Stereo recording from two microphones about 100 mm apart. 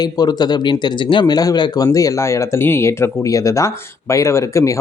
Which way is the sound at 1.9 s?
35° left (ahead or behind).